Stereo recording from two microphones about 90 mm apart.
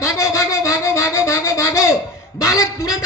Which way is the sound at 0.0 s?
35° left (ahead or behind).